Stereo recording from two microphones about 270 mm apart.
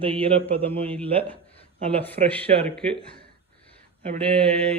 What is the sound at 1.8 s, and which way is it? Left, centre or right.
Speech, right.